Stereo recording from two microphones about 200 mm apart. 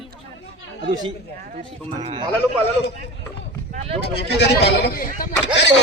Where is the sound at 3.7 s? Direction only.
35° right (ahead or behind).